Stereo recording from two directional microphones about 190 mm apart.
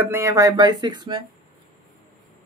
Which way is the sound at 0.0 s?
15° right (ahead or behind).